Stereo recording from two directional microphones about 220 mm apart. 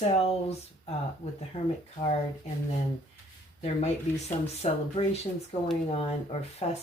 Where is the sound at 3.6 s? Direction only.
30° left (ahead or behind).